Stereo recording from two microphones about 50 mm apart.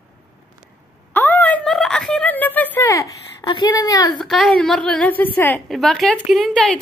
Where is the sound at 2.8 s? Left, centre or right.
Left.